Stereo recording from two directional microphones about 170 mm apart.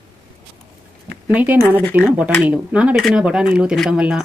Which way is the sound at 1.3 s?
10° right (ahead or behind).